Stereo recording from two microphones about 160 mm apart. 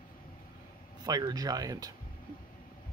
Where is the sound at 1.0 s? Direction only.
25° right (ahead or behind).